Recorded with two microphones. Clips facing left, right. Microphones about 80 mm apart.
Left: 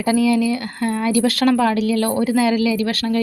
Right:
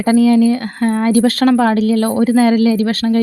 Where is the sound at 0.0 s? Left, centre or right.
Right.